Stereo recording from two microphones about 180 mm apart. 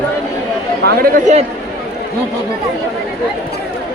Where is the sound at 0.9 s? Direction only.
45° right (ahead or behind).